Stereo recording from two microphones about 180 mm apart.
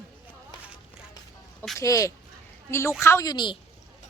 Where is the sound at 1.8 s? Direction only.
20° left (ahead or behind).